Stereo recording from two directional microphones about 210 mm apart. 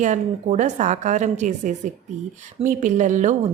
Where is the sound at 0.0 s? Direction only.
35° right (ahead or behind).